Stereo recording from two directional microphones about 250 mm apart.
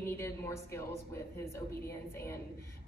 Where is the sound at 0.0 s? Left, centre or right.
Centre.